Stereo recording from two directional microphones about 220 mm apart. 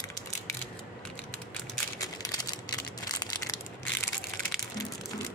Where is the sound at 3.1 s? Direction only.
15° left (ahead or behind).